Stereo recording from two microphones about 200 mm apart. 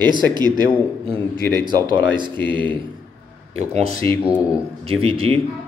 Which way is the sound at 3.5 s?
30° right (ahead or behind).